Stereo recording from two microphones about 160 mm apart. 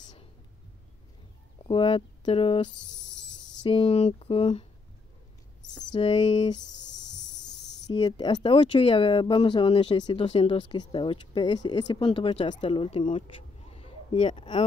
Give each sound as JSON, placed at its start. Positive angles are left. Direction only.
{"t": 1.7, "sound": "speech", "side_deg": 35}
{"t": 3.2, "sound": "a sound", "side_deg": 90}
{"t": 3.6, "sound": "speech", "side_deg": 35}
{"t": 5.9, "sound": "speech", "side_deg": 30}
{"t": 7.9, "sound": "speech", "side_deg": 30}
{"t": 13.1, "sound": "a sound", "side_deg": 35}